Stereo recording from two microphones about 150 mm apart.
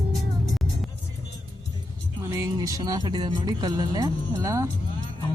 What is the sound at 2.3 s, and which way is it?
Speech, 25° right (ahead or behind).